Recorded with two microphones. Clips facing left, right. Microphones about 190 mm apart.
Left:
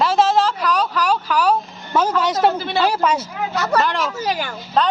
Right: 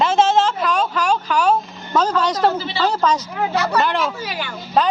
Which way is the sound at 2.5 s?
55° left (ahead or behind).